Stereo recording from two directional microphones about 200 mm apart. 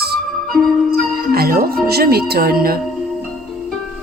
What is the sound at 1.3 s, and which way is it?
Speech, 50° right (ahead or behind).